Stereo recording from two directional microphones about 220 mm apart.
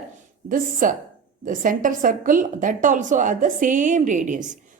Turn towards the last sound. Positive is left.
turn(degrees=-35)  # may be behind; listen again after turning